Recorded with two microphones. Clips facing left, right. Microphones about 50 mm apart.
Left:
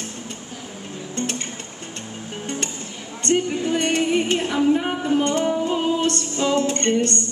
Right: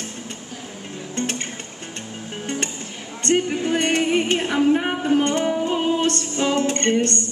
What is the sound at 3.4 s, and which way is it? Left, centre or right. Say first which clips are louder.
Music: right 1 dB; right.